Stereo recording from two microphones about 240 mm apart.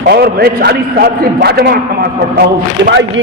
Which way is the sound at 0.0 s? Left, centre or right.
Right.